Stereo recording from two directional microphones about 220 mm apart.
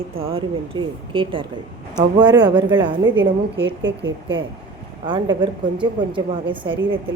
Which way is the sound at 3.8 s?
55° right (ahead or behind).